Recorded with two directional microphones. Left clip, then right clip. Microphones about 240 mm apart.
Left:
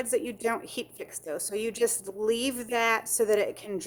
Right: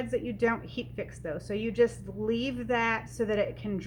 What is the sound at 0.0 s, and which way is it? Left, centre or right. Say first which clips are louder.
A woman's voice: even; left.